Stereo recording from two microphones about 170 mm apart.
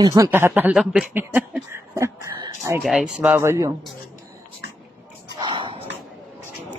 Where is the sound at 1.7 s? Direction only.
15° right (ahead or behind).